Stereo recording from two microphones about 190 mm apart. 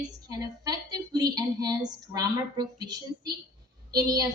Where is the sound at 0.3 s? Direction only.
20° right (ahead or behind).